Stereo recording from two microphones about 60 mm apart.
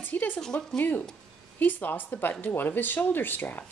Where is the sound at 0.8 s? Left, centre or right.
Left.